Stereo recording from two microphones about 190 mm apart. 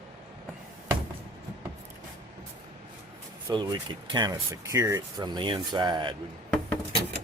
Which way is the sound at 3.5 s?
25° right (ahead or behind).